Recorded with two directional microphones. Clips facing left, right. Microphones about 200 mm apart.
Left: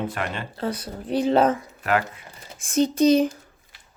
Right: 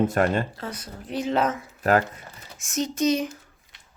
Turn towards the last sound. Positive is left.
turn(degrees=35)  # may be behind; listen again after turning